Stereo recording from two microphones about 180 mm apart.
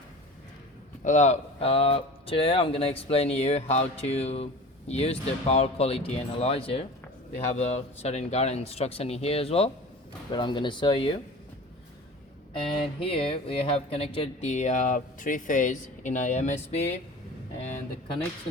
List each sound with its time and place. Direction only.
1.0 s speech: 40° left (ahead or behind)
13.0 s speech: 30° left (ahead or behind)